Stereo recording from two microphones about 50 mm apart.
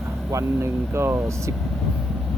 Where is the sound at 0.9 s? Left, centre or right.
Right.